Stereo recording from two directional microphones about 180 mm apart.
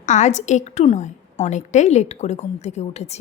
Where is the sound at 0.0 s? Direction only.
40° left (ahead or behind).